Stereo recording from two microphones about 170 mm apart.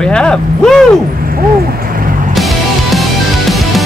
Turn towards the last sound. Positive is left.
turn(degrees=0)  # may be behind; listen again after turning